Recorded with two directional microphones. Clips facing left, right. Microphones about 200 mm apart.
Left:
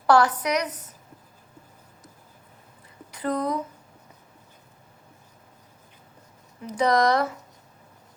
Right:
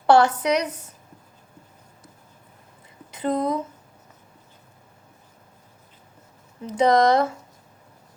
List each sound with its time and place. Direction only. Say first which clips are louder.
0.1 s a woman's voice: right 3 dB; 25° right (ahead or behind)
3.1 s a woman's voice: right 3 dB; 25° right (ahead or behind)
6.7 s a woman's voice: right 3 dB; 25° right (ahead or behind)